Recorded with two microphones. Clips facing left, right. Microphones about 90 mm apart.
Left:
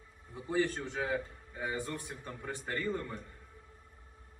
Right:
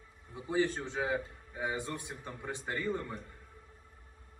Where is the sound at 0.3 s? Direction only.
15° right (ahead or behind).